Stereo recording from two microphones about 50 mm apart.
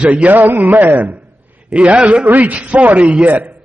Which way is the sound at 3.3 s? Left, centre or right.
Right.